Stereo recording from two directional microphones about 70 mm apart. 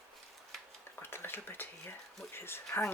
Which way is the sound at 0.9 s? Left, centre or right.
Left.